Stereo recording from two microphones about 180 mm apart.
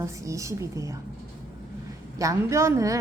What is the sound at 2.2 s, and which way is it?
Speech, 15° right (ahead or behind).